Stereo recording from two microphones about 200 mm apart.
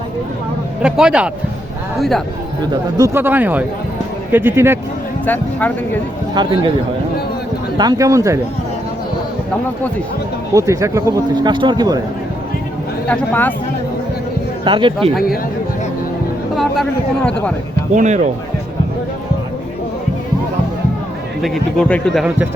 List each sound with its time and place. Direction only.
0.8 s speech: 5° right (ahead or behind)
3.0 s speech: 10° right (ahead or behind)
5.2 s speech: 10° left (ahead or behind)
6.3 s a man's voice: 20° right (ahead or behind)
7.8 s speech: 20° right (ahead or behind)
10.5 s speech: 15° right (ahead or behind)
13.1 s speech: 10° left (ahead or behind)
14.6 s speech: 25° right (ahead or behind)
17.9 s speech: 35° right (ahead or behind)
21.4 s speech: centre (ahead or behind)